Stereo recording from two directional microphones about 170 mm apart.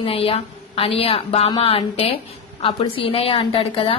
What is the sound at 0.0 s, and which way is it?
A woman's voice, 35° left (ahead or behind).